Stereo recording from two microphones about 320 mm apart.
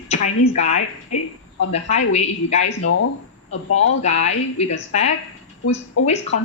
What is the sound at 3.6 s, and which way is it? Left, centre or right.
Speech, left.